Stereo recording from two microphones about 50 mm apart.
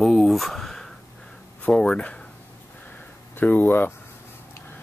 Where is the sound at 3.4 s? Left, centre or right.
Left.